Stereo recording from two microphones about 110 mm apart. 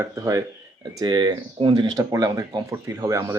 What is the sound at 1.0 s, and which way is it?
Speech, 45° right (ahead or behind).